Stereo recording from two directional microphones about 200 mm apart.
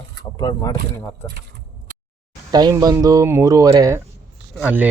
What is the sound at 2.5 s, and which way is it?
Speech, 20° right (ahead or behind).